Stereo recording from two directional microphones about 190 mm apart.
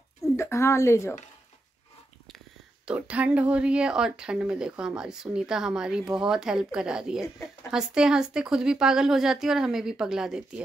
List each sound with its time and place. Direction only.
0.4 s a woman's voice: 15° left (ahead or behind)
2.8 s speech: 5° right (ahead or behind)